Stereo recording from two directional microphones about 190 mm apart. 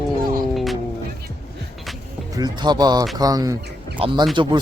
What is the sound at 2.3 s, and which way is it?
Speech, 20° right (ahead or behind).